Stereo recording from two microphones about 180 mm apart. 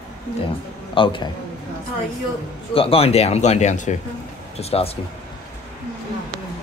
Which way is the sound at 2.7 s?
30° left (ahead or behind).